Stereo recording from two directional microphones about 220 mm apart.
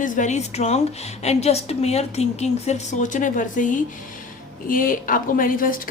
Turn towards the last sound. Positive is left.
turn(degrees=40)  # may be behind; listen again after turning